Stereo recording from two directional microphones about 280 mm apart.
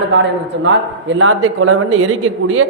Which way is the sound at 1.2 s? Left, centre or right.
Right.